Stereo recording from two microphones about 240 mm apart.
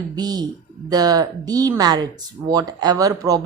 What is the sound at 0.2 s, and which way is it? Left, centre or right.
Speech, centre.